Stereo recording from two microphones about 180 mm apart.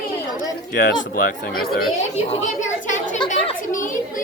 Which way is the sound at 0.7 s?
60° left (ahead or behind).